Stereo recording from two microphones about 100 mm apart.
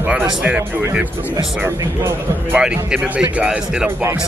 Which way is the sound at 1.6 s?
25° right (ahead or behind).